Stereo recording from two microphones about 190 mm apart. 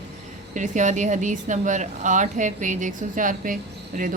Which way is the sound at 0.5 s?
40° right (ahead or behind).